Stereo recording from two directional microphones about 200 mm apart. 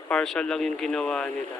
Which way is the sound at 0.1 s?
5° left (ahead or behind).